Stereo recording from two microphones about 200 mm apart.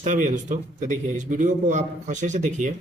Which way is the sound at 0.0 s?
40° right (ahead or behind).